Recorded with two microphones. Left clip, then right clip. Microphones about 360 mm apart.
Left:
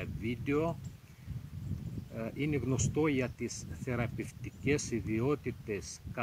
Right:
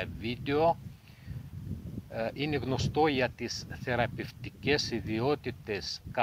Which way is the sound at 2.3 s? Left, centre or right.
Right.